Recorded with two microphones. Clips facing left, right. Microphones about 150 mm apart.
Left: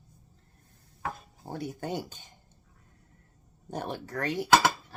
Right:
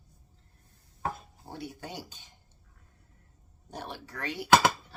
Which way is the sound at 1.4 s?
45° left (ahead or behind).